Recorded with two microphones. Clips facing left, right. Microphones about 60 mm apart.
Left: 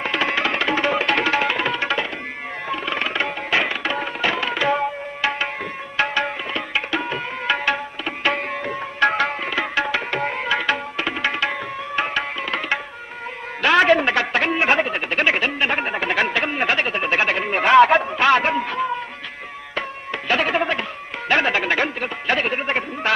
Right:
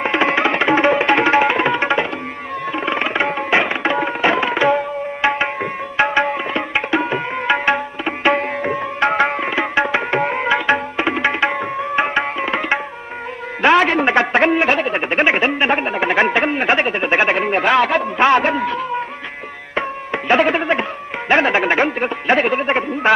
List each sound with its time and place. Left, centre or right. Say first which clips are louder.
0.0 s music: right 5 dB; right
2.7 s tabla: right 4 dB; right
13.6 s a sound: right 2 dB; right
19.7 s tabla: right 6 dB; right
21.3 s music: right 4 dB; right
22.7 s a sound: right 6 dB; right